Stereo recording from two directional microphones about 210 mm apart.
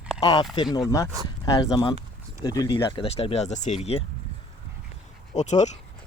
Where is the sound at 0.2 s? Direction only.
20° left (ahead or behind).